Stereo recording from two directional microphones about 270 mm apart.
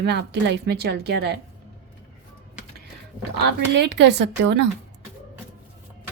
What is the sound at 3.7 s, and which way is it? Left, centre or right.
Speech, right.